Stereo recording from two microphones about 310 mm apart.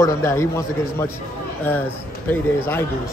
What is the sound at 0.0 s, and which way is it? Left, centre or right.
A man's voice, centre.